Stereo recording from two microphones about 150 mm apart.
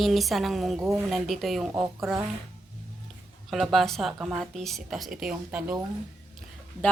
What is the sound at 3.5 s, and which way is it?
A woman's voice, centre (ahead or behind).